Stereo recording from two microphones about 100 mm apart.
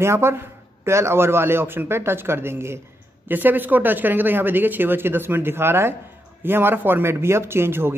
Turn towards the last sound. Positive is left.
turn(degrees=-25)  # may be behind; listen again after turning